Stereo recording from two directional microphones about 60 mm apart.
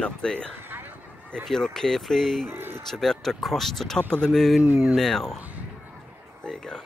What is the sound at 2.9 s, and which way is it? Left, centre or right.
Speech, centre.